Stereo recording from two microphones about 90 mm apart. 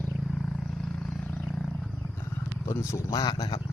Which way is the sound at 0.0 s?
10° left (ahead or behind).